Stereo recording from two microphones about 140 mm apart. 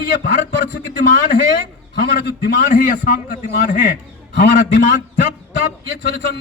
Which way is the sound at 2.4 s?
75° left (ahead or behind).